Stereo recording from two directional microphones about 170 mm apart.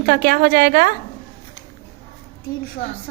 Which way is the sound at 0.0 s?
60° right (ahead or behind).